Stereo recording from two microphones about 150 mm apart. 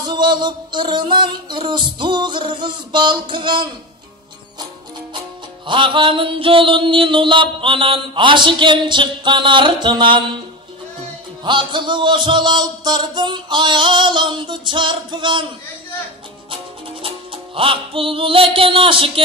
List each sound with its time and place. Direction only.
0.0 s mantra: 30° right (ahead or behind)
5.7 s mantra: 35° right (ahead or behind)
11.4 s mantra: 30° right (ahead or behind)
17.6 s mantra: 35° right (ahead or behind)